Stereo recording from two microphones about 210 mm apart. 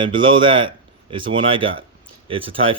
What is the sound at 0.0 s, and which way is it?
Speech, 25° right (ahead or behind).